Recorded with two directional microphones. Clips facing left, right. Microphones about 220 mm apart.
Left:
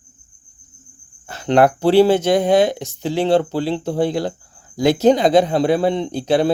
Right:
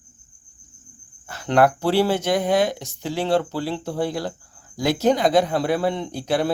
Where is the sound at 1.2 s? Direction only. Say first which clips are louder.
Left 4 dB; 25° left (ahead or behind).